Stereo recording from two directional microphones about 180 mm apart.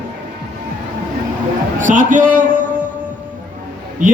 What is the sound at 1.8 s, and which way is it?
Speech, 45° right (ahead or behind).